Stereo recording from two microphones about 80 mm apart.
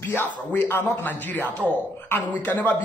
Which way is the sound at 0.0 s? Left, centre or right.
Left.